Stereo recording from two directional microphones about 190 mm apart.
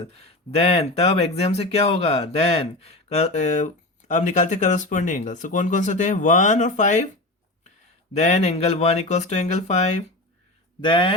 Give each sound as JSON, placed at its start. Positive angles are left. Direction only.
{"t": 0.2, "sound": "speech", "side_deg": 30}
{"t": 8.1, "sound": "speech", "side_deg": 35}
{"t": 10.8, "sound": "speech", "side_deg": 25}